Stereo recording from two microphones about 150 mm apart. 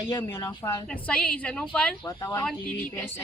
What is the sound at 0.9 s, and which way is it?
A woman's voice, 5° left (ahead or behind).